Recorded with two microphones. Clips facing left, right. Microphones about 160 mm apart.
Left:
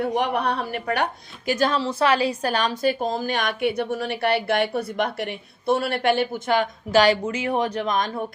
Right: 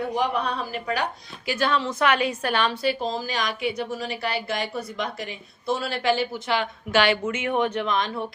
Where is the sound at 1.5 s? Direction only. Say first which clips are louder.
Left 2 dB; 40° left (ahead or behind).